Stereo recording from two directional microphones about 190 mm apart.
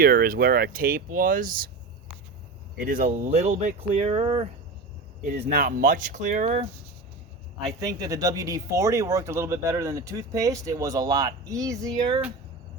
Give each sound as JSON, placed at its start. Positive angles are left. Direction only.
{"t": 0.0, "sound": "speech", "side_deg": -50}
{"t": 2.7, "sound": "speech", "side_deg": -50}
{"t": 5.2, "sound": "speech", "side_deg": -45}
{"t": 7.8, "sound": "speech", "side_deg": -20}